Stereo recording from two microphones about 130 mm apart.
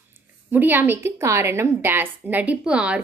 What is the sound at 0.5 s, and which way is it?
A woman's voice, 15° right (ahead or behind).